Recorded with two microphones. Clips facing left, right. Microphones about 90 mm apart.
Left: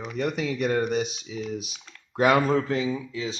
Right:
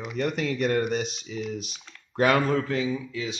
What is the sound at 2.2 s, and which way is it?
Speech, 20° left (ahead or behind).